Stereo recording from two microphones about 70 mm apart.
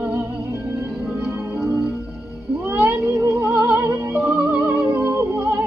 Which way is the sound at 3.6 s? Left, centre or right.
Right.